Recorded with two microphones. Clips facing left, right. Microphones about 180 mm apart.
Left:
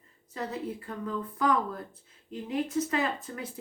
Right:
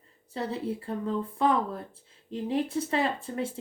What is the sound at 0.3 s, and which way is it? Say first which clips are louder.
A woman's voice: right 3 dB; 30° right (ahead or behind).